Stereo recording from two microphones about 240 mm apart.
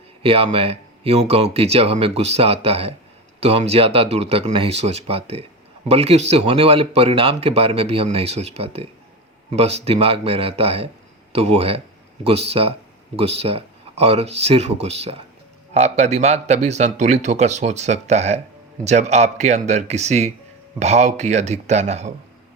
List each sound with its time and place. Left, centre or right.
0.2 s speech: right